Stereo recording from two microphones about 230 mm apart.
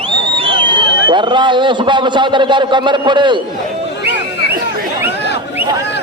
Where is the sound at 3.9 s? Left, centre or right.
Left.